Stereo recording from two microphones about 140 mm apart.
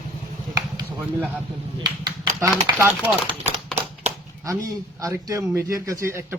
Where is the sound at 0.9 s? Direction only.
15° right (ahead or behind).